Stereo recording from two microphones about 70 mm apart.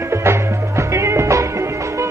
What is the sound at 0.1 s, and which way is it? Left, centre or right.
Music, right.